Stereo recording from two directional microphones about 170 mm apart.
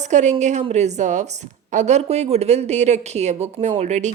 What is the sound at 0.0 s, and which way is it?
A woman's voice, 45° right (ahead or behind).